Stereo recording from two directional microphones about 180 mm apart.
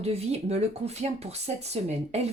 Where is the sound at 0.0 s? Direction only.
35° right (ahead or behind).